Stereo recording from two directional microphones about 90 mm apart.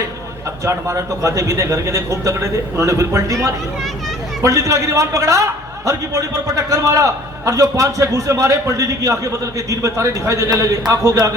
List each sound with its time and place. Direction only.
0.6 s a man's voice: 35° right (ahead or behind)